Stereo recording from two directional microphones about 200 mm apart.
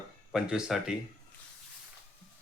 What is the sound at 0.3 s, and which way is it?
Speech, 5° right (ahead or behind).